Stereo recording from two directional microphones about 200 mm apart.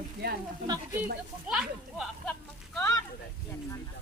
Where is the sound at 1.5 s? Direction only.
5° right (ahead or behind).